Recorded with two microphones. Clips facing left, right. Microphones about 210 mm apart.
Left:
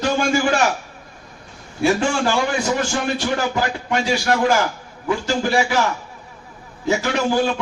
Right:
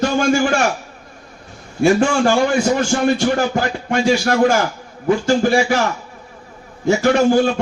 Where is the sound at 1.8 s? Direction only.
50° right (ahead or behind).